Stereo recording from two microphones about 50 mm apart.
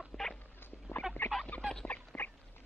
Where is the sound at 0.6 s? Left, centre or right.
Left.